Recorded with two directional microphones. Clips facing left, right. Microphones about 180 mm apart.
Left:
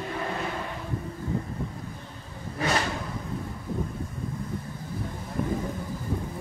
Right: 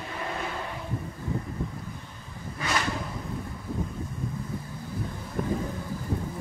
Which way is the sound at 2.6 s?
35° left (ahead or behind).